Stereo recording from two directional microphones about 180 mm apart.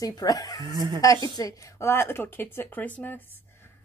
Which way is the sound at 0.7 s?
25° right (ahead or behind).